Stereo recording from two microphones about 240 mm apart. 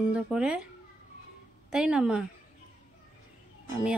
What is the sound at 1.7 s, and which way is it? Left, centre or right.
Speech, centre.